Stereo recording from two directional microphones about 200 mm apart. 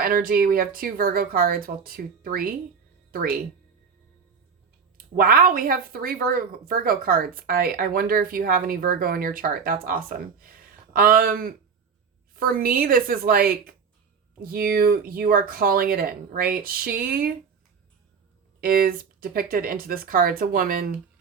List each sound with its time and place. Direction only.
0.0 s speech: 45° right (ahead or behind)
4.9 s speech: 45° right (ahead or behind)
18.6 s speech: 45° right (ahead or behind)